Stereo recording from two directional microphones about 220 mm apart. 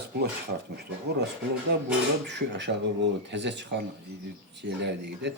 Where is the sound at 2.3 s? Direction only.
50° right (ahead or behind).